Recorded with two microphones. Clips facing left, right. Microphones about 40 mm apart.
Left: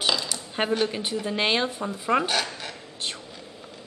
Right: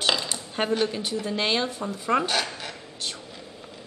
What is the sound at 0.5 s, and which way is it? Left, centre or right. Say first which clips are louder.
A man's voice: even; centre.